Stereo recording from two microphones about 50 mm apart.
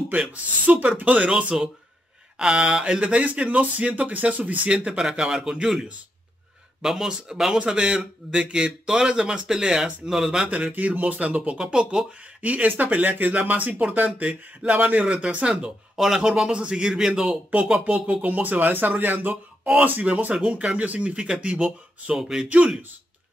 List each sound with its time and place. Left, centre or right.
0.1 s speech: right
1.5 s speech: centre; by 4.6 s right
4.6 s speech: centre
10.7 s speech: right; by 12.0 s centre
12.4 s speech: right
17.5 s speech: right
19.6 s speech: right
22.1 s speech: centre
22.5 s speech: right